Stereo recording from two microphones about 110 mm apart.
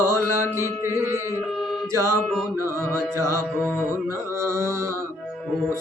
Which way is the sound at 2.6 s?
20° right (ahead or behind).